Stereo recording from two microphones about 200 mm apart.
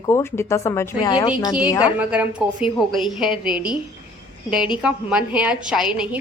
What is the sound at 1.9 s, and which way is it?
A woman's voice, 5° right (ahead or behind).